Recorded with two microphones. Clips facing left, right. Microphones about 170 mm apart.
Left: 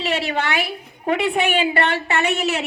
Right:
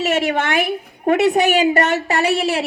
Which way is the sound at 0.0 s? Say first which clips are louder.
Right 4 dB; 45° right (ahead or behind).